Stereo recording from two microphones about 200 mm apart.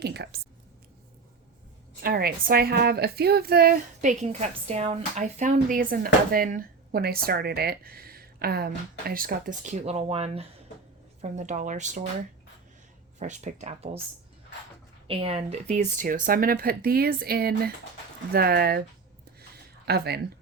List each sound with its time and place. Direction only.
0.0 s a woman's voice: 55° right (ahead or behind)
2.0 s a woman's voice: 50° right (ahead or behind)
13.1 s speech: 35° right (ahead or behind)
15.0 s a woman's voice: 25° right (ahead or behind); by 18.8 s 50° right (ahead or behind)
19.8 s speech: 55° right (ahead or behind)